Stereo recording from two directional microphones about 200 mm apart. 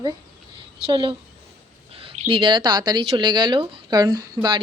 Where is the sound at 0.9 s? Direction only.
25° right (ahead or behind).